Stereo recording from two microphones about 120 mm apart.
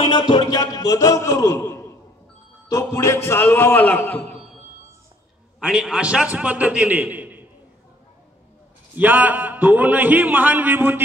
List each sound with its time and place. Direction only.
0.0 s a man's voice: 40° left (ahead or behind); by 4.4 s 15° left (ahead or behind)
5.7 s a man's voice: 5° right (ahead or behind)
8.9 s a man's voice: 15° right (ahead or behind)